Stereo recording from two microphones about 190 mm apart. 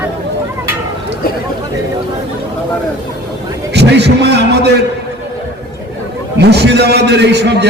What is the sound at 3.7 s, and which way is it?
Speech, 60° right (ahead or behind).